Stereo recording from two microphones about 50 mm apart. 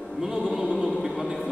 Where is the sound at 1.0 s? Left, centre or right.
Centre.